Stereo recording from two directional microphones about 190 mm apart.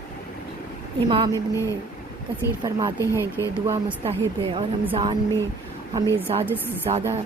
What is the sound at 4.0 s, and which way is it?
Speech, 30° right (ahead or behind).